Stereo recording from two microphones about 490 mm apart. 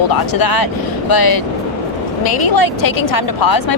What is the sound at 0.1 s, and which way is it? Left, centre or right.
Speech, left.